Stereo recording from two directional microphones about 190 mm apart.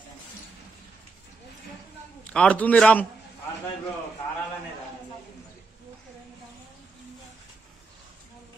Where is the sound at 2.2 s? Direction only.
5° left (ahead or behind).